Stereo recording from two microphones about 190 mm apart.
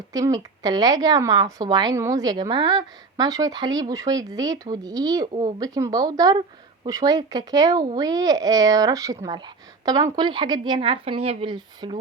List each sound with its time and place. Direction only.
0.1 s a woman's voice: 20° right (ahead or behind)